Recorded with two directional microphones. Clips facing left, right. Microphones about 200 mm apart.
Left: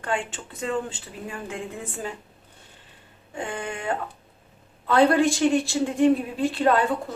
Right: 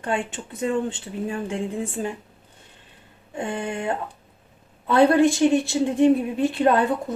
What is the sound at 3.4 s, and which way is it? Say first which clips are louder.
A woman's voice: right 4 dB; 20° right (ahead or behind).